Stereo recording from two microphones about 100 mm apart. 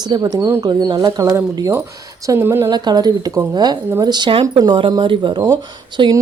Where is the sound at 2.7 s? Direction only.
45° right (ahead or behind).